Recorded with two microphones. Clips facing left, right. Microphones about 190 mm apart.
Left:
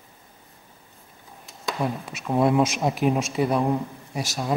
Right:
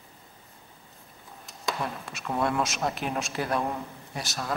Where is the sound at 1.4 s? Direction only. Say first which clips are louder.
Left 5 dB; centre (ahead or behind).